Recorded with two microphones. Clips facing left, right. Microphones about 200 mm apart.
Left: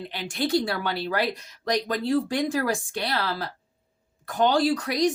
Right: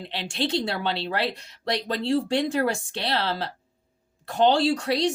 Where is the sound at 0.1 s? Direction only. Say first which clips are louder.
Left 2 dB; 25° right (ahead or behind).